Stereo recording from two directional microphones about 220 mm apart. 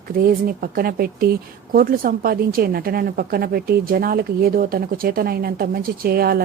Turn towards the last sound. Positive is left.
turn(degrees=-45)  # may be behind; listen again after turning